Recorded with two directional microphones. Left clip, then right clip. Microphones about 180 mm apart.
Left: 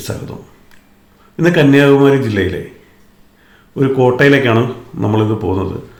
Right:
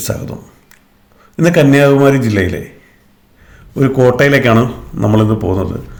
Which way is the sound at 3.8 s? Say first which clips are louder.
Right 1 dB; 45° right (ahead or behind).